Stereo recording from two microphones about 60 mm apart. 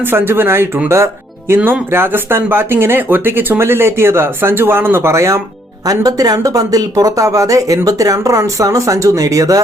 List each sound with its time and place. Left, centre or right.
0.1 s speech: right
1.5 s speech: right
5.8 s speech: right